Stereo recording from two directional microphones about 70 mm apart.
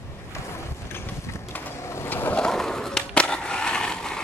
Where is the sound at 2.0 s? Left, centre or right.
Left.